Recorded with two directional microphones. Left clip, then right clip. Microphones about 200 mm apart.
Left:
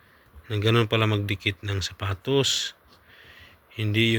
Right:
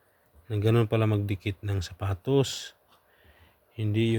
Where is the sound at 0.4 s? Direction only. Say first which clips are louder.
Left 3 dB; 25° right (ahead or behind).